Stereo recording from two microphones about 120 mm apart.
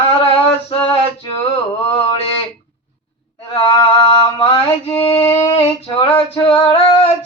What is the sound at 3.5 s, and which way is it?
Mantra, 50° left (ahead or behind).